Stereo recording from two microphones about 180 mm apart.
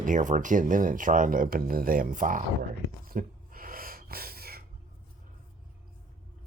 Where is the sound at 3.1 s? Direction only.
55° right (ahead or behind).